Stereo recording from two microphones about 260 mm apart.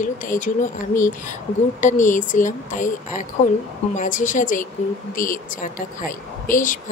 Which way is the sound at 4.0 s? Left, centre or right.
Left.